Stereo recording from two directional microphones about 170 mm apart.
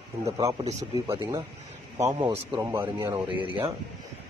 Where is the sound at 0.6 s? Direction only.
40° right (ahead or behind).